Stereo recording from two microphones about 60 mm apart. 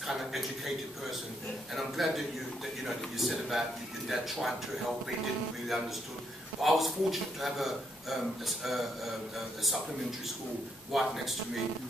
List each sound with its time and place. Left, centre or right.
0.0 s a sound: centre
1.8 s a man's voice: centre
6.6 s a man's voice: centre
10.9 s a man's voice: centre